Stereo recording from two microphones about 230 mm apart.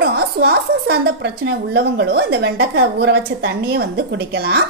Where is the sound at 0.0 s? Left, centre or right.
Right.